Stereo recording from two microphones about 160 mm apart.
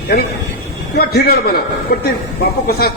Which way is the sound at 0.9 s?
75° left (ahead or behind).